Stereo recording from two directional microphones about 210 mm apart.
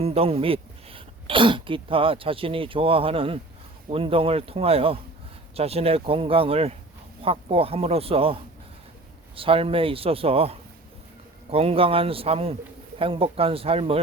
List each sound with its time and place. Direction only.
0.0 s speech: 30° right (ahead or behind)